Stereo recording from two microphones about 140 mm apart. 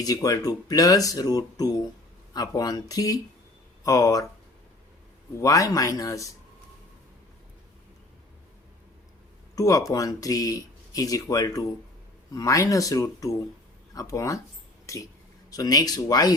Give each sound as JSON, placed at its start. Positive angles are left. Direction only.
{"t": 0.0, "sound": "speech", "side_deg": 25}
{"t": 5.4, "sound": "speech", "side_deg": 25}
{"t": 9.6, "sound": "speech", "side_deg": 25}